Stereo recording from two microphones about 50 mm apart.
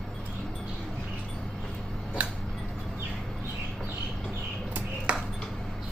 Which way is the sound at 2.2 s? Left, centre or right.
Right.